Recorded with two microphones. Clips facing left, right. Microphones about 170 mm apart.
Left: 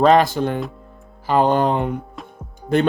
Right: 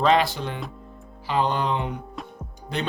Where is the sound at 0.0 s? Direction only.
45° left (ahead or behind).